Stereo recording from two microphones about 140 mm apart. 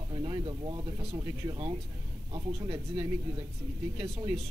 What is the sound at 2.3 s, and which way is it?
Speech, 40° right (ahead or behind).